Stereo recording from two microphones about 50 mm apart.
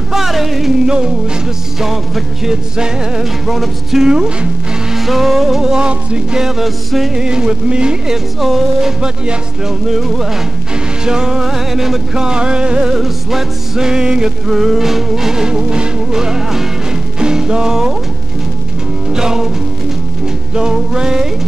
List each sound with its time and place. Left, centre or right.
0.1 s music: centre
0.8 s music: centre
1.8 s music: centre
2.5 s music: centre
3.4 s music: centre
4.9 s music: centre; by 6.4 s right
6.4 s music: centre
7.2 s music: centre
8.4 s music: centre
9.0 s music: centre
9.8 s music: centre
19.0 s music: centre
20.5 s music: centre